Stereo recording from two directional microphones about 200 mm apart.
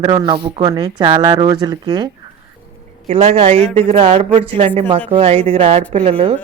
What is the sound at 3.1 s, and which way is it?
Speech, 30° right (ahead or behind).